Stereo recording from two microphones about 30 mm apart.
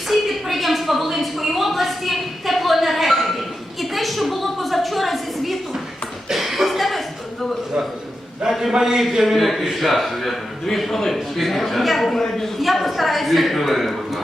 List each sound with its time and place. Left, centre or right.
0.1 s a sound: centre
3.8 s a woman's voice: centre
6.2 s chuckle: centre
8.5 s a man's voice: right
8.8 s a woman's voice: centre